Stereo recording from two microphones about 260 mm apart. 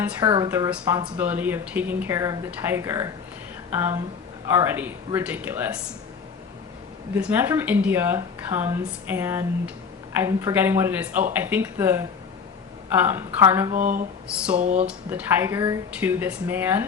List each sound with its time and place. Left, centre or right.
0.0 s a woman's voice: centre
7.1 s a woman's voice: centre
13.7 s speech: right
14.8 s a woman's voice: centre